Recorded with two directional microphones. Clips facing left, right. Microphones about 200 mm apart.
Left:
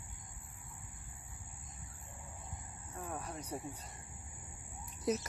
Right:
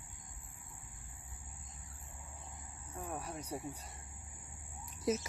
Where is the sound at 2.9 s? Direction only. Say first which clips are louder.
Right 1 dB; 10° right (ahead or behind).